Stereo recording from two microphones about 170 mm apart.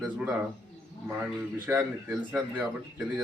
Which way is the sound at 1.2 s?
10° right (ahead or behind).